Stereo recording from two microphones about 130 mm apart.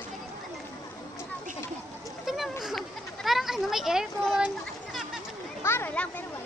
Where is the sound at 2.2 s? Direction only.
Centre (ahead or behind).